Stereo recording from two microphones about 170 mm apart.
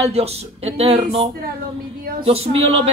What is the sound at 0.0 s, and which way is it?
Speech, 35° right (ahead or behind).